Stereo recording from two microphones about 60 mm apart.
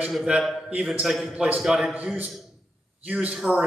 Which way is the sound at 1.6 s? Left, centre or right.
Centre.